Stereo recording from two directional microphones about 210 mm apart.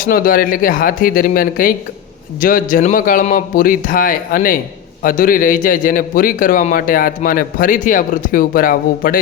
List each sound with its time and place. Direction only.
0.0 s a man's voice: 45° left (ahead or behind)